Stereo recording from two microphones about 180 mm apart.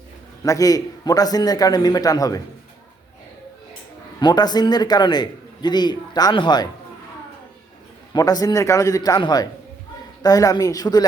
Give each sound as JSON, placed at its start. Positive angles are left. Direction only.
{"t": 0.4, "sound": "a man's voice", "side_deg": 20}
{"t": 4.2, "sound": "a man's voice", "side_deg": 25}
{"t": 8.1, "sound": "a man's voice", "side_deg": 20}